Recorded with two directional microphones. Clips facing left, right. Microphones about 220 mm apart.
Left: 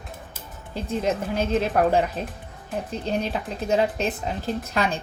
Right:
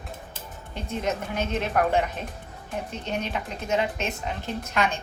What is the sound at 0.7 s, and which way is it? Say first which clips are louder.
Speech: left 4 dB; 35° left (ahead or behind).